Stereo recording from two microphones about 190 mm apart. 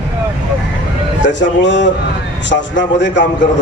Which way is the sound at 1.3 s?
70° left (ahead or behind).